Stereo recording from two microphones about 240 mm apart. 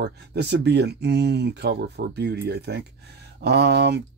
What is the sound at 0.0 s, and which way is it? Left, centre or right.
Speech, right.